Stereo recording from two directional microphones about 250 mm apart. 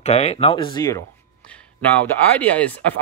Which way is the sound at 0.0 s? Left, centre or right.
Left.